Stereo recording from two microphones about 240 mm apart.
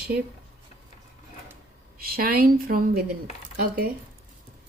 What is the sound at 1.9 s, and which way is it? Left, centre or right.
Speech, right.